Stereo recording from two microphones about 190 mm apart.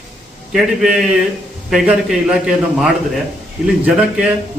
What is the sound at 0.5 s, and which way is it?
A man's voice, 5° right (ahead or behind).